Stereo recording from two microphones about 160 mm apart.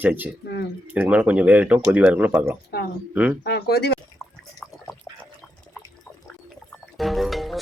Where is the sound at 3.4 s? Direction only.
85° left.